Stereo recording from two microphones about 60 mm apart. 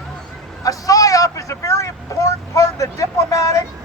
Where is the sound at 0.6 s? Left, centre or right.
Left.